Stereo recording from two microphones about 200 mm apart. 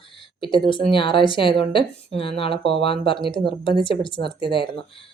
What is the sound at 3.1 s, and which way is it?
Speech, 25° left (ahead or behind).